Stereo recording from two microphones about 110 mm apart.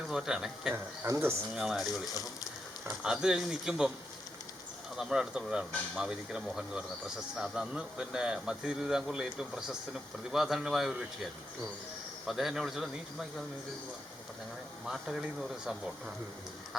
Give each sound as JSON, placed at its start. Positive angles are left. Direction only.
{"t": 0.1, "sound": "speech", "side_deg": -5}
{"t": 0.7, "sound": "speech", "side_deg": -25}
{"t": 1.5, "sound": "speech", "side_deg": 0}
{"t": 3.0, "sound": "speech", "side_deg": -5}
{"t": 4.9, "sound": "speech", "side_deg": -5}
{"t": 14.8, "sound": "speech", "side_deg": -5}